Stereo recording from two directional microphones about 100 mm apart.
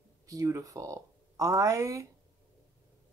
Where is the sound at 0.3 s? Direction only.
35° right (ahead or behind).